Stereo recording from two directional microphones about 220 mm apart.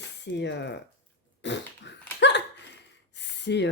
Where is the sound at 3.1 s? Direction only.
50° left (ahead or behind).